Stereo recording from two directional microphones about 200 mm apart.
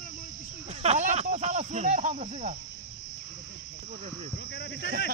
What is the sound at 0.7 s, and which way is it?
Speech, 35° right (ahead or behind).